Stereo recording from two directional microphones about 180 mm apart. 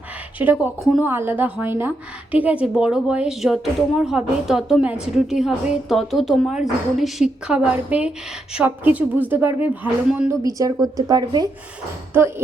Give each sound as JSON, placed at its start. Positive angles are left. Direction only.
{"t": 0.3, "sound": "speech", "side_deg": -10}
{"t": 10.4, "sound": "a woman's voice", "side_deg": -20}